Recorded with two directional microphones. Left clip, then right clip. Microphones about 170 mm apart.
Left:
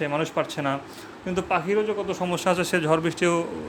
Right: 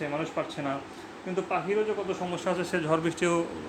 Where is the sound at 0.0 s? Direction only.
55° left (ahead or behind).